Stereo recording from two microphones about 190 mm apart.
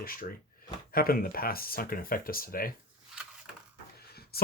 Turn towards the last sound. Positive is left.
turn(degrees=55)  # may be behind; listen again after turning